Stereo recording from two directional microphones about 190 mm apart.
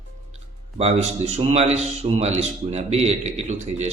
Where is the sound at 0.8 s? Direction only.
35° right (ahead or behind).